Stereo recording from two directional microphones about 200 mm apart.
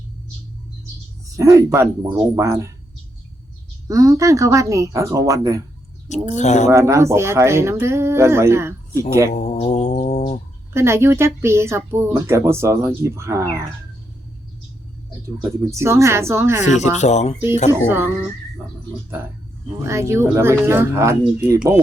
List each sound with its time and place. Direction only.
1.4 s speech: 15° right (ahead or behind)
3.8 s speech: 15° right (ahead or behind)
6.3 s speech: 35° left (ahead or behind)
6.7 s speech: 15° right (ahead or behind)
9.3 s mantra: 35° left (ahead or behind)
10.8 s speech: 15° right (ahead or behind)
15.4 s speech: 15° right (ahead or behind)
16.6 s speech: 35° left (ahead or behind)
17.7 s speech: 10° right (ahead or behind)
19.8 s speech: 15° right (ahead or behind)